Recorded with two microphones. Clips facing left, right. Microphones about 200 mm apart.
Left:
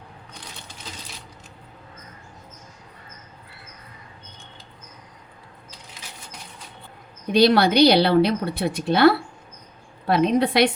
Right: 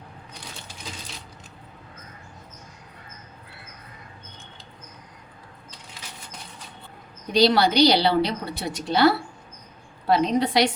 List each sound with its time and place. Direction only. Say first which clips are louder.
7.3 s a woman's voice: left 2 dB; 55° left (ahead or behind)